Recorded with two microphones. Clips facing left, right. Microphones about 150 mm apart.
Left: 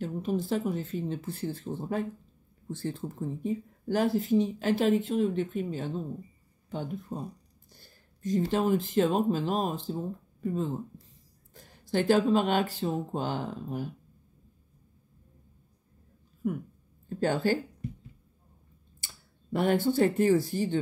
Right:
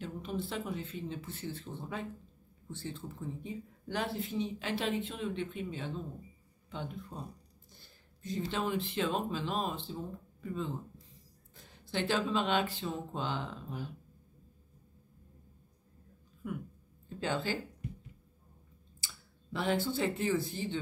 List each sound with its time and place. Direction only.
0.0 s speech: 40° left (ahead or behind)
3.1 s speech: 40° left (ahead or behind)
7.7 s a sound: 45° left (ahead or behind)
8.5 s speech: 45° left (ahead or behind)
16.4 s speech: 45° left (ahead or behind)
18.9 s speech: 50° left (ahead or behind)